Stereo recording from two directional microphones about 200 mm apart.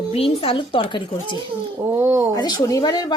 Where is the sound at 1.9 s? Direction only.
10° right (ahead or behind).